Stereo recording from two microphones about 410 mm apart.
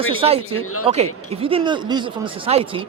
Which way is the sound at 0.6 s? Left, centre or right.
Left.